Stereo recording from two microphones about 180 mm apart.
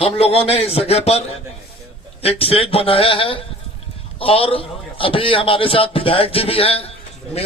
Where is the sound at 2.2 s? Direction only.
30° left (ahead or behind).